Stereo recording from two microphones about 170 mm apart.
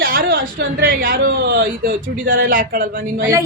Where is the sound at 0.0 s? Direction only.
55° right (ahead or behind).